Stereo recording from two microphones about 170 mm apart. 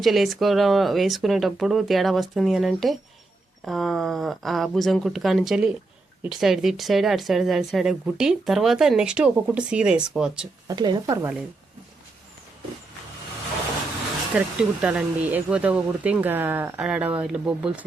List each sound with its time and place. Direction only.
0.0 s speech: centre (ahead or behind)
10.7 s a woman's voice: 25° right (ahead or behind)
14.3 s speech: 5° right (ahead or behind)